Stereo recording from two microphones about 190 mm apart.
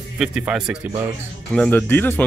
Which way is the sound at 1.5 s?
5° left (ahead or behind).